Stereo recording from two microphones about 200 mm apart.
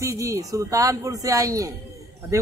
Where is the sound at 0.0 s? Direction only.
15° right (ahead or behind).